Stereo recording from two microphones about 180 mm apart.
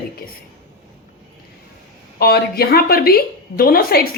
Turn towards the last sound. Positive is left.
turn(degrees=55)  # may be behind; listen again after turning